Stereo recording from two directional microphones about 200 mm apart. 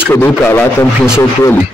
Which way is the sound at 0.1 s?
10° left (ahead or behind).